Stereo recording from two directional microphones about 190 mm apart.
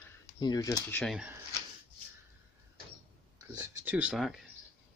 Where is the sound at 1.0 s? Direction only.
Centre (ahead or behind).